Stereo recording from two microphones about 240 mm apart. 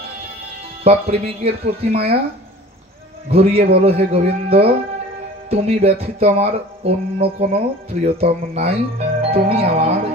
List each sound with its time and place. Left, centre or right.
0.8 s speech: right
3.3 s speech: right